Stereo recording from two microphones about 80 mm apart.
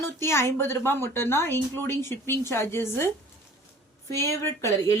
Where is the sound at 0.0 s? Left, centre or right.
Left.